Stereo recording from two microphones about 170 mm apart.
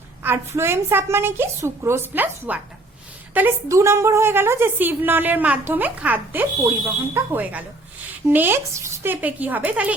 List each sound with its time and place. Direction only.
0.2 s a woman's voice: 15° right (ahead or behind)